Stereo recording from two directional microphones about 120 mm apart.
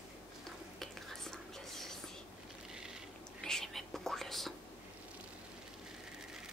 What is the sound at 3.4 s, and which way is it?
Whispering, 5° left (ahead or behind).